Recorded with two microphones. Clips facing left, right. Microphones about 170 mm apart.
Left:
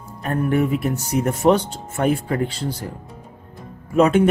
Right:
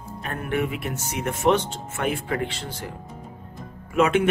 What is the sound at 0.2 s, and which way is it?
Speech, 40° left (ahead or behind).